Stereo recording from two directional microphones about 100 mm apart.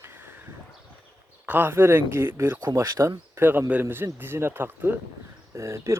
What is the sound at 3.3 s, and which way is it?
Speech, 20° right (ahead or behind).